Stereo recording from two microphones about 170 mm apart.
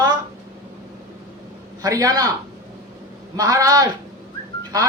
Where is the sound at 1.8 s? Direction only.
20° right (ahead or behind).